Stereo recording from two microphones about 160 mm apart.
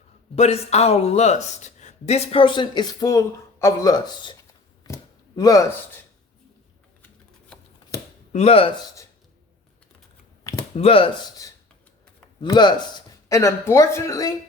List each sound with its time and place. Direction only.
0.3 s speech: 40° left (ahead or behind)
5.4 s speech: 20° left (ahead or behind)
8.3 s speech: 40° left (ahead or behind)
10.8 s speech: 35° left (ahead or behind)
11.4 s speech: 20° left (ahead or behind)